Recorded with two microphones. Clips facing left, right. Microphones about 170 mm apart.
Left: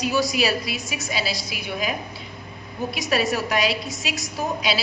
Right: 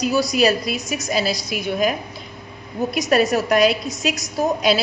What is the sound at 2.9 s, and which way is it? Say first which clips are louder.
Speech: right 6 dB; 50° right (ahead or behind).